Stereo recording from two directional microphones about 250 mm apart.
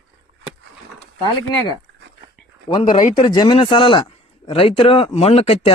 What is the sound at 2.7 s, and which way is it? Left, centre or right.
A man's voice, left.